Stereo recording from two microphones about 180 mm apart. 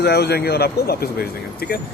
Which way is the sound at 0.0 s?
65° left (ahead or behind).